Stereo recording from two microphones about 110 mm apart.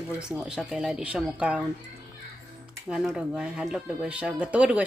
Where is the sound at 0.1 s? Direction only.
10° right (ahead or behind).